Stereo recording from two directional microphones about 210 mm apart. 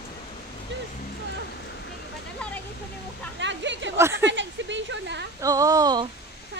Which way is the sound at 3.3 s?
60° right (ahead or behind).